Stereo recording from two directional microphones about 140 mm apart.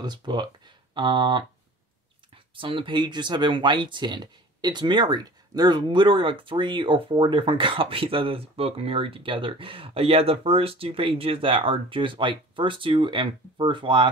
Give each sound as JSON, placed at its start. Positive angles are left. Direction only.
{"t": 0.0, "sound": "speech", "side_deg": -30}